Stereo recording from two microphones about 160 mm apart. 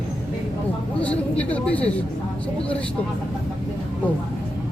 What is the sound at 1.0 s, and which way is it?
Speech, 10° left (ahead or behind).